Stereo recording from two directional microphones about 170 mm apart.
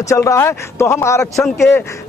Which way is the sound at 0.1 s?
15° left (ahead or behind).